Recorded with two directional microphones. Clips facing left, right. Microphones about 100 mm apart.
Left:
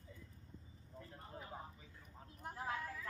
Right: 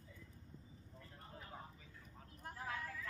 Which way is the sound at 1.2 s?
20° left (ahead or behind).